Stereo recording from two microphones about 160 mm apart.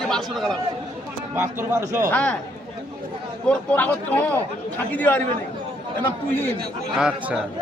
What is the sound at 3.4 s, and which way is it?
Speech, 10° left (ahead or behind).